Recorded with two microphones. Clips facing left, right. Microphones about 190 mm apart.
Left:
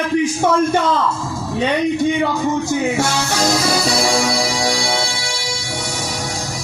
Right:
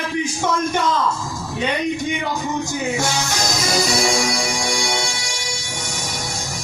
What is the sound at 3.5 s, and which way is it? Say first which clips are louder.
Music: left 3 dB; 30° left (ahead or behind).